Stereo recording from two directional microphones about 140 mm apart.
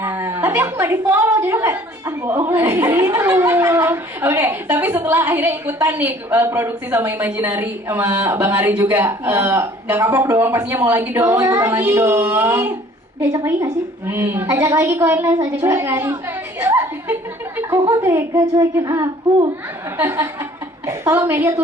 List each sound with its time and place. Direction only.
0.0 s a woman's voice: 15° right (ahead or behind)